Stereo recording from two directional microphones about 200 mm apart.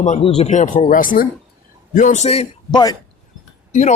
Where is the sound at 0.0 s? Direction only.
30° left (ahead or behind).